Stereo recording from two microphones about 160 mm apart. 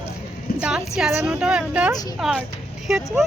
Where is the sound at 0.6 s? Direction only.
5° right (ahead or behind).